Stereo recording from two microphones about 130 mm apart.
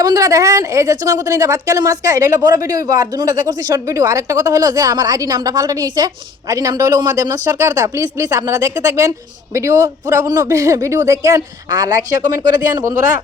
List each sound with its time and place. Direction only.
0.0 s speech: 25° right (ahead or behind)